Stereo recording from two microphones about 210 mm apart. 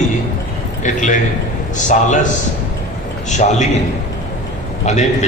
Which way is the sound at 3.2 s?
35° left (ahead or behind).